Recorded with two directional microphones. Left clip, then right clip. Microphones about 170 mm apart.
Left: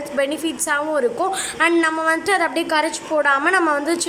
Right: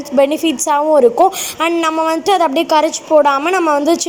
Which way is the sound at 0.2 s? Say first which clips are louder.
Right 9 dB; 15° right (ahead or behind).